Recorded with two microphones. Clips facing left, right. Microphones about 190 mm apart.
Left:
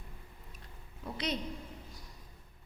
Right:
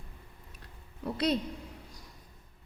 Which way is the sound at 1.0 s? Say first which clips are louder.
Right 8 dB; 60° right (ahead or behind).